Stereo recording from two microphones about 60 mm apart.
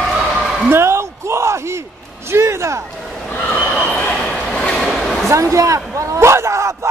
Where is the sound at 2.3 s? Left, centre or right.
Right.